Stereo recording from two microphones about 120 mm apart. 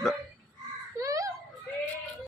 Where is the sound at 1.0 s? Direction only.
25° right (ahead or behind).